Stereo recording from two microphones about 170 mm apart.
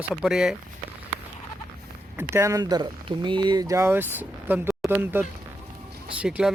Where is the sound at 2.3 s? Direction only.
15° right (ahead or behind).